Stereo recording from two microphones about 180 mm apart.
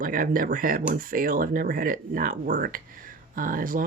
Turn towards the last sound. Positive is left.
turn(degrees=-50)  # may be behind; listen again after turning